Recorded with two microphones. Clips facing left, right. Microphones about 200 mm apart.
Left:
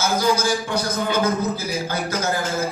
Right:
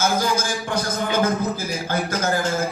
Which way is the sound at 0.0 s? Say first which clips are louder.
Left 2 dB; 50° right (ahead or behind).